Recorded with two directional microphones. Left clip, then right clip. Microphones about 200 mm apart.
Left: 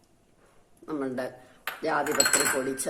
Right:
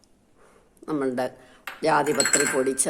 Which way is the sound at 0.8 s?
45° right (ahead or behind).